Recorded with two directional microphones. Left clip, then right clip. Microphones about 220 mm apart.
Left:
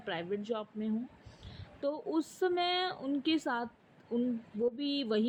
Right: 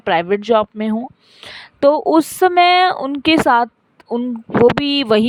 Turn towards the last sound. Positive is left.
turn(degrees=-50)  # may be behind; listen again after turning